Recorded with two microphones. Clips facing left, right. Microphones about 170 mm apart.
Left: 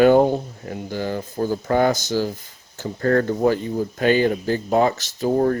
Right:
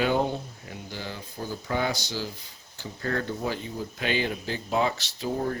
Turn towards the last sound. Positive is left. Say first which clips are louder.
# left 10 dB
turn(degrees=50)  # may be behind; listen again after turning